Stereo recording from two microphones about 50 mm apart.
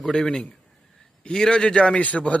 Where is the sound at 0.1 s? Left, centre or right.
Centre.